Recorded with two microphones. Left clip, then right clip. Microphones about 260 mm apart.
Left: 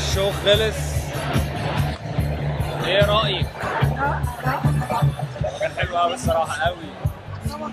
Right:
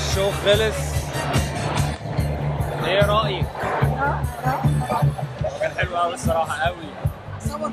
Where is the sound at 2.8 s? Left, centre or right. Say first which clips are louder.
Left 1 dB; centre.